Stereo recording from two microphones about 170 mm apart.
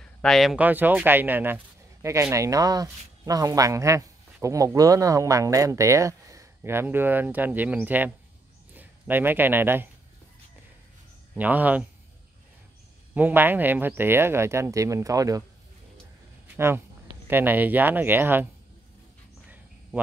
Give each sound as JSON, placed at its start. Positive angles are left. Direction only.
{"t": 0.0, "sound": "speech", "side_deg": 5}
{"t": 11.3, "sound": "speech", "side_deg": -10}
{"t": 13.1, "sound": "speech", "side_deg": -10}
{"t": 16.5, "sound": "speech", "side_deg": -15}